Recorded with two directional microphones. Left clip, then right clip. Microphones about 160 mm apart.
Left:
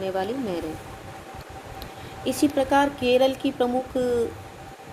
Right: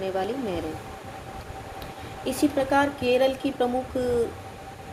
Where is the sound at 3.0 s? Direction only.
Centre (ahead or behind).